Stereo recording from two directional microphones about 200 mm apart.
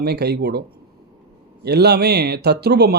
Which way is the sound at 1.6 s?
55° right (ahead or behind).